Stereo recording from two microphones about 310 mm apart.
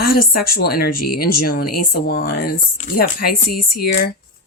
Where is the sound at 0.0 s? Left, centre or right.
Left.